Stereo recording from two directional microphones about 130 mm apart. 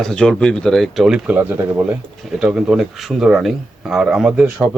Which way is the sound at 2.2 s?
Centre (ahead or behind).